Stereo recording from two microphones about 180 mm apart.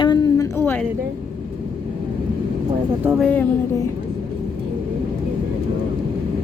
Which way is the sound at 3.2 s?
5° left (ahead or behind).